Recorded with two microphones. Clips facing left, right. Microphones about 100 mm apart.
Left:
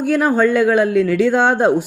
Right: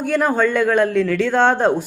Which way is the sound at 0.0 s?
5° left (ahead or behind).